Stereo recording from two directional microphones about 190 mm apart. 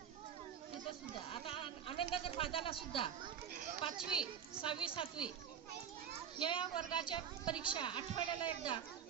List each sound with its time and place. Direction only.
1.3 s a woman's voice: 30° left (ahead or behind)
6.4 s a woman's voice: 25° left (ahead or behind)